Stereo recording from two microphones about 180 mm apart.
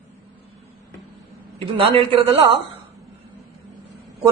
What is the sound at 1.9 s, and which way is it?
Speech, 30° right (ahead or behind).